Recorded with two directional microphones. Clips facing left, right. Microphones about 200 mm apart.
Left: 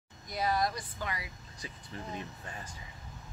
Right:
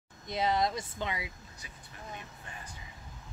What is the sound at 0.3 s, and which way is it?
Speech, 25° right (ahead or behind).